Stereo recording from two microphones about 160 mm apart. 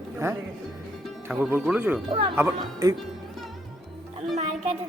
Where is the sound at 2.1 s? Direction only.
35° right (ahead or behind).